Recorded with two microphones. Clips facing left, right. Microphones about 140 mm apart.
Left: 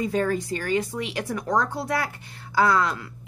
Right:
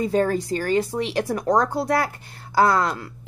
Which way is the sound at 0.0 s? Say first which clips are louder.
Right 3 dB; 35° right (ahead or behind).